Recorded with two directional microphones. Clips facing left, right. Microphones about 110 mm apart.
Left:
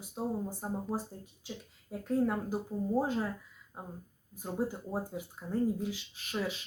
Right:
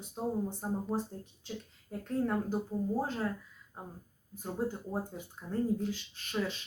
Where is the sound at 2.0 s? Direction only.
5° left (ahead or behind).